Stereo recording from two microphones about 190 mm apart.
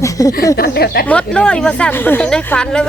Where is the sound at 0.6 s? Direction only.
55° left (ahead or behind).